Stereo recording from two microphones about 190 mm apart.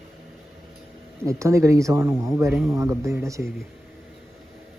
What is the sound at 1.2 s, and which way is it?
Speech, 15° right (ahead or behind).